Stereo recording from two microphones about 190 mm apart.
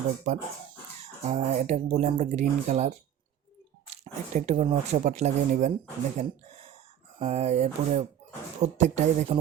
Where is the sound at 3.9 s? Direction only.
35° right (ahead or behind).